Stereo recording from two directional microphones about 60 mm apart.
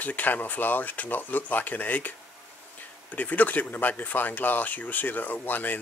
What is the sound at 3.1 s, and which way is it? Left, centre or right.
Speech, left.